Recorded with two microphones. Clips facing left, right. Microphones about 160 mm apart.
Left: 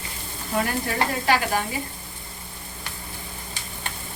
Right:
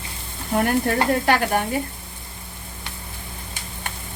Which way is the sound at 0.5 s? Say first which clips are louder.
Right 5 dB; 50° right (ahead or behind).